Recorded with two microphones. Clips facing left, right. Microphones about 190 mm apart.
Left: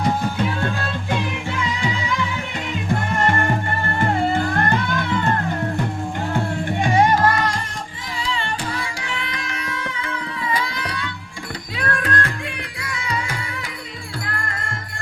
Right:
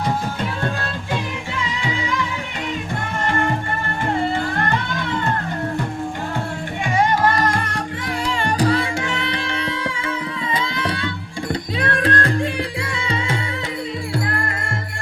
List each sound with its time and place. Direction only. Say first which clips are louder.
7.4 s music: right 4 dB; 60° right (ahead or behind)
9.2 s carnatic music: right 5 dB; 30° right (ahead or behind)
11.8 s music: right 2 dB; 30° right (ahead or behind)